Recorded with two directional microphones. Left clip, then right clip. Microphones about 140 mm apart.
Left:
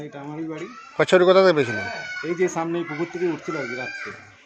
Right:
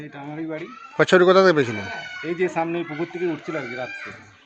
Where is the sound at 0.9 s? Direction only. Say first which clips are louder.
Right 1 dB; 50° right (ahead or behind).